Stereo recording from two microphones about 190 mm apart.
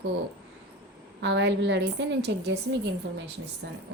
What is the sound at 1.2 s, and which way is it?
A woman's voice, 70° right (ahead or behind).